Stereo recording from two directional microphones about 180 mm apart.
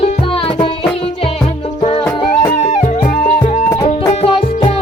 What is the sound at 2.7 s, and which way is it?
Music, 45° left (ahead or behind).